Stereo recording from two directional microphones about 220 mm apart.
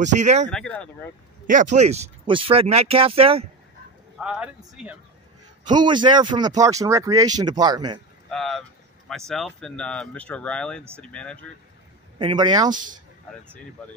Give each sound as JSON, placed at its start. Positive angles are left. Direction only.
{"t": 0.0, "sound": "speech", "side_deg": -30}
{"t": 0.5, "sound": "speech", "side_deg": 5}
{"t": 1.5, "sound": "speech", "side_deg": -35}
{"t": 4.2, "sound": "speech", "side_deg": -5}
{"t": 5.7, "sound": "speech", "side_deg": -20}
{"t": 8.3, "sound": "speech", "side_deg": 0}
{"t": 12.2, "sound": "speech", "side_deg": -20}
{"t": 12.7, "sound": "speech", "side_deg": -35}